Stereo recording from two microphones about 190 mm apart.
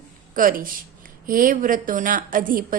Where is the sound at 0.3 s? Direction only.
45° right (ahead or behind).